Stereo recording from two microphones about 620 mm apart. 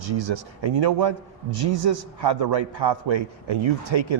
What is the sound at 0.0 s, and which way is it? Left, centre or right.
A man's voice, right.